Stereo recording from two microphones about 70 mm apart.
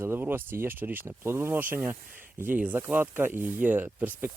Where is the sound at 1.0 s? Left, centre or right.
Right.